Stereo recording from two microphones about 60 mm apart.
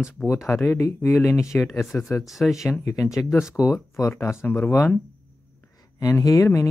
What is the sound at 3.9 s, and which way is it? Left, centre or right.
Speech, left.